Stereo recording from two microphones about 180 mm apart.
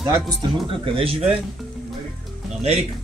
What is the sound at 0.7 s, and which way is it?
Speech, 30° right (ahead or behind).